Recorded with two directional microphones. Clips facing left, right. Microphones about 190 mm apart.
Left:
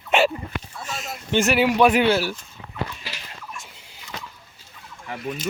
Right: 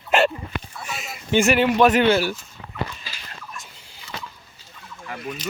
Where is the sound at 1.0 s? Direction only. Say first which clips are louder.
Right 2 dB; centre (ahead or behind).